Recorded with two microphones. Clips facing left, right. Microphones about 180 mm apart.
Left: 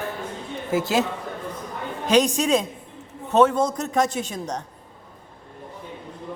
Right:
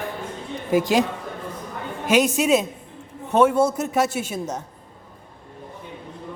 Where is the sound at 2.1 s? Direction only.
5° right (ahead or behind).